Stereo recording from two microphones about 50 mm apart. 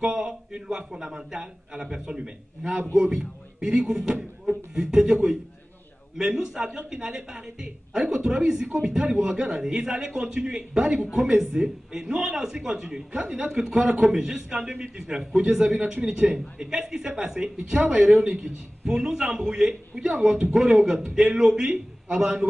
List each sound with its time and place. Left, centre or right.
0.0 s a man's voice: centre
6.4 s a woman's voice: centre
13.5 s a woman's voice: centre
13.7 s a man's voice: right
17.6 s a man's voice: right
18.9 s a woman's voice: centre